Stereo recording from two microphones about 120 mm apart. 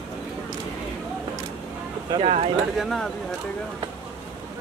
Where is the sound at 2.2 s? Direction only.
60° right (ahead or behind).